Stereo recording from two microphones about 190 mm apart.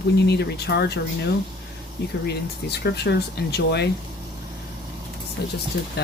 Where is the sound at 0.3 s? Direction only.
60° left (ahead or behind).